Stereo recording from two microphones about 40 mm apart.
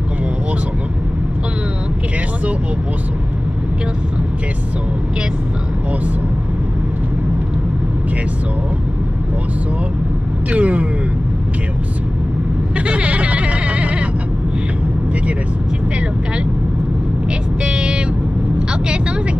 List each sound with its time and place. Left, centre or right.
10.5 s speech: right
12.7 s a sound: right
17.6 s vehicle: right